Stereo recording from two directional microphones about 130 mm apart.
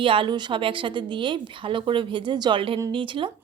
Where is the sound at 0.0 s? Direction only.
40° right (ahead or behind).